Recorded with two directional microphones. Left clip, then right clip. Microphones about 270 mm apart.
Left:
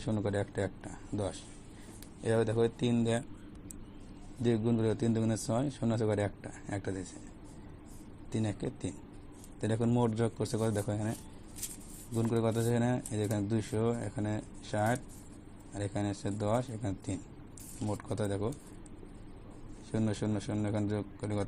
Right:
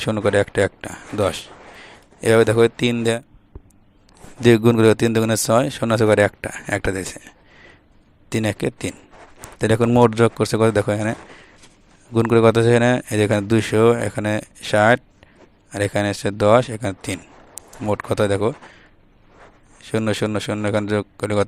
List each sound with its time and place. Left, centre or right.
0.0 s a man's voice: right
4.4 s a man's voice: right
8.3 s a man's voice: right
12.1 s a man's voice: right
19.8 s a man's voice: right